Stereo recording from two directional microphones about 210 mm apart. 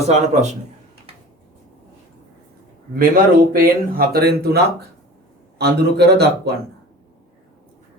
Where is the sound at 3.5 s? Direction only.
45° right (ahead or behind).